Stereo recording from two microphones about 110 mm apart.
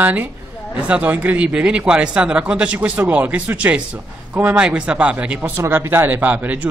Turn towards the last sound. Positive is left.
turn(degrees=-15)  # may be behind; listen again after turning